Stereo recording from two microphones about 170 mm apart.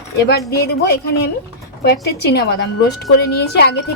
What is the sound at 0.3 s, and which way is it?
A woman's voice, 70° left (ahead or behind).